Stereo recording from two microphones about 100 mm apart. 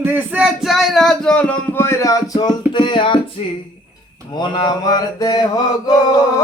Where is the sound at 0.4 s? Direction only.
Centre (ahead or behind); by 3.2 s 55° left (ahead or behind).